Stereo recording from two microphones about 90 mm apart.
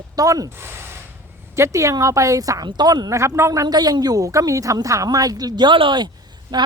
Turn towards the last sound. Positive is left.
turn(degrees=-50)  # may be behind; listen again after turning